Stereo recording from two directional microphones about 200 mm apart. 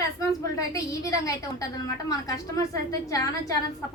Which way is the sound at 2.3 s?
15° left (ahead or behind).